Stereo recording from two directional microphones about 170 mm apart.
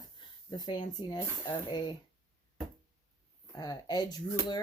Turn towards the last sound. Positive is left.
turn(degrees=25)  # may be behind; listen again after turning